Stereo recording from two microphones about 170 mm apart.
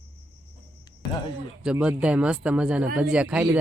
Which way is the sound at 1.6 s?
5° right (ahead or behind).